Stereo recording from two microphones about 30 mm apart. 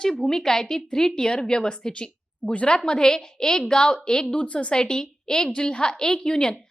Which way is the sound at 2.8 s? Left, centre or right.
Left.